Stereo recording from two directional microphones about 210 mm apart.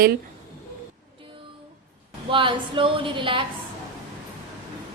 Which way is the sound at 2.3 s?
25° right (ahead or behind).